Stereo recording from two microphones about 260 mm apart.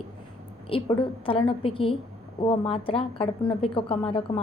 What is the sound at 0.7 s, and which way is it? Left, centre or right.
A woman's voice, centre.